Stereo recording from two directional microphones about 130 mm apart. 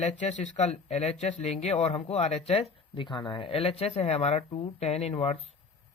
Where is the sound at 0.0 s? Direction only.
65° left (ahead or behind).